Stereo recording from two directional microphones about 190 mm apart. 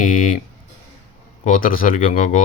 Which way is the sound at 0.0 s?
45° left (ahead or behind).